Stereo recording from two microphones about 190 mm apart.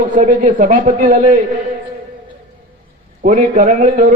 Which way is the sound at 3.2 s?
40° right (ahead or behind).